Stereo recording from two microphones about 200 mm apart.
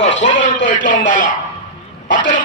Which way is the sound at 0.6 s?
40° left (ahead or behind).